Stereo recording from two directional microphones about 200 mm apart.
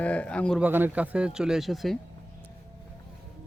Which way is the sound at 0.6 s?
10° right (ahead or behind).